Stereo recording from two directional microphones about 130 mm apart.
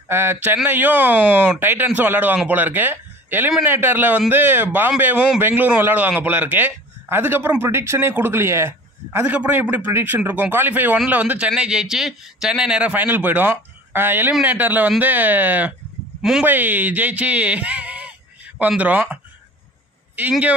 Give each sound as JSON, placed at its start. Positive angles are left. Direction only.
{"t": 0.1, "sound": "a man's voice", "side_deg": -15}
{"t": 20.2, "sound": "a man's voice", "side_deg": -10}